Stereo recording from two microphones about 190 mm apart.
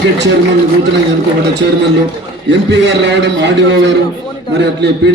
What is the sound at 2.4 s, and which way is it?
A man's voice, 65° right (ahead or behind).